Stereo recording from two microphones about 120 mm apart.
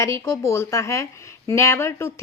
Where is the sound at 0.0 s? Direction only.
25° left (ahead or behind).